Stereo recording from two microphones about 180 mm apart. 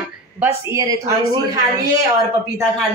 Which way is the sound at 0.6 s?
20° right (ahead or behind).